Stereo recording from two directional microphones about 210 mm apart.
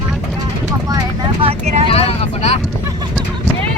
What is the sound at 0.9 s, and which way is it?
Vehicle, 15° right (ahead or behind).